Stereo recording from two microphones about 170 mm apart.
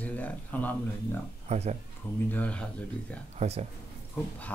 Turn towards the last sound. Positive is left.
turn(degrees=-40)  # may be behind; listen again after turning